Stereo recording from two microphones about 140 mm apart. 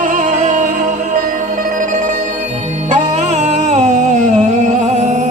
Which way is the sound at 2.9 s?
55° right (ahead or behind).